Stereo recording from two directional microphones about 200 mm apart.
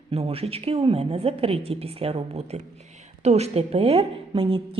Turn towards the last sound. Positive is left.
turn(degrees=-25)  # may be behind; listen again after turning